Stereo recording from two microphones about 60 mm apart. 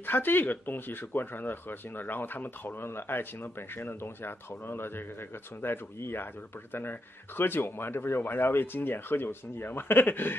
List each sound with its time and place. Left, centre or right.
0.0 s speech: left